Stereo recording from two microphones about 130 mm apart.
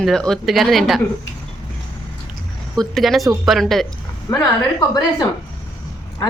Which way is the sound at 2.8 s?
Centre (ahead or behind).